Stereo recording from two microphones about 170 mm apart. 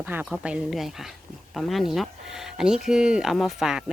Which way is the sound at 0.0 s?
10° right (ahead or behind).